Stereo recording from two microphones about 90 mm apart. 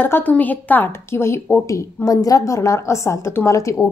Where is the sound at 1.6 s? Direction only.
35° left (ahead or behind).